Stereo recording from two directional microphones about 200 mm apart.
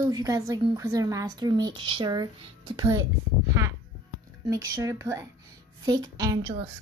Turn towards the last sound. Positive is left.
turn(degrees=-20)  # may be behind; listen again after turning